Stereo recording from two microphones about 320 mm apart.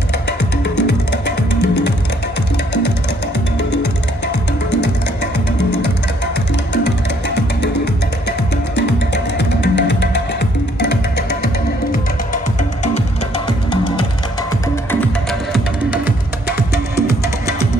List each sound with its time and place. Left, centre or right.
0.7 s music: left
3.5 s music: left
6.7 s music: left
13.5 s music: centre
15.5 s music: centre